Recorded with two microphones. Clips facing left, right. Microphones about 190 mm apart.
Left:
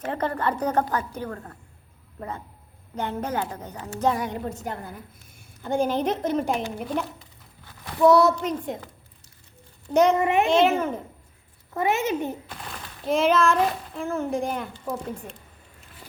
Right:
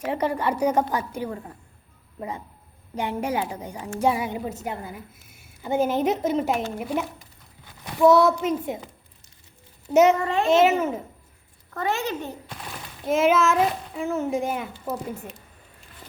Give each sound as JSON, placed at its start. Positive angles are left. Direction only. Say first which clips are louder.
{"t": 0.0, "sound": "a woman's voice", "louder": "right 2 dB", "side_deg": -10}
{"t": 9.9, "sound": "a child's voice", "louder": "right 2 dB", "side_deg": -5}
{"t": 10.2, "sound": "a child's voice", "louder": "left 3 dB", "side_deg": 20}
{"t": 10.5, "sound": "a child's voice", "louder": "right 2 dB", "side_deg": -5}
{"t": 11.7, "sound": "a woman's voice", "louder": "left 3 dB", "side_deg": 15}
{"t": 12.5, "sound": "speech", "louder": "right 1 dB", "side_deg": -5}